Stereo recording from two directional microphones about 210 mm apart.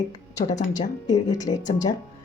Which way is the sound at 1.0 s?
20° left (ahead or behind).